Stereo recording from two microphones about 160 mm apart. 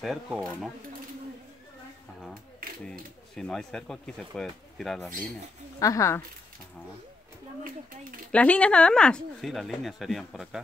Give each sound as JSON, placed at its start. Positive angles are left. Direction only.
{"t": 0.0, "sound": "speech", "side_deg": 0}
{"t": 2.8, "sound": "speech", "side_deg": 5}
{"t": 5.8, "sound": "speech", "side_deg": 20}
{"t": 8.3, "sound": "speech", "side_deg": 10}